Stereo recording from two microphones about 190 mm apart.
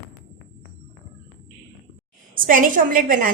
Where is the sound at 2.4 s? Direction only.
45° right (ahead or behind).